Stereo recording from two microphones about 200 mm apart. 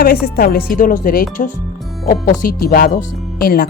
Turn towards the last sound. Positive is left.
turn(degrees=50)  # may be behind; listen again after turning